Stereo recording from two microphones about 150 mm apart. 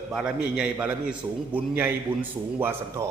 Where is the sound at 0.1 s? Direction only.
5° right (ahead or behind).